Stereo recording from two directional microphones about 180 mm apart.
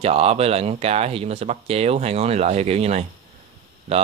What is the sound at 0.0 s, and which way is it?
Speech, 35° right (ahead or behind).